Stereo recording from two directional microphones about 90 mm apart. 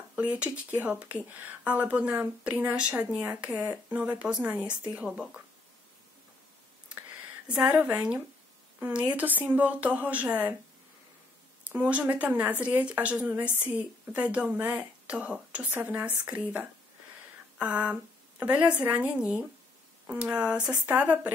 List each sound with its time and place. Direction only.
0.1 s speech: 15° right (ahead or behind)
7.7 s speech: 15° right (ahead or behind)
11.7 s speech: 20° right (ahead or behind)